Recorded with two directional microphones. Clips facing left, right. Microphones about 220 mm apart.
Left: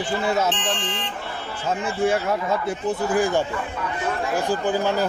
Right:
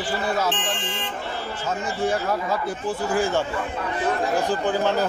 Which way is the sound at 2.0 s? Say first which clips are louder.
Left 2 dB; 25° left (ahead or behind).